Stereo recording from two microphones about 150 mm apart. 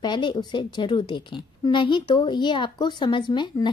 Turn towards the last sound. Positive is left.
turn(degrees=30)  # may be behind; listen again after turning